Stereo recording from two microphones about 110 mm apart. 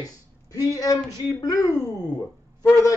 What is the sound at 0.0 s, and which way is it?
Speech, 30° left (ahead or behind).